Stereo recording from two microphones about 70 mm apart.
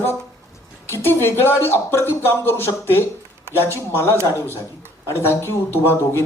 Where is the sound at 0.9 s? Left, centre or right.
Left.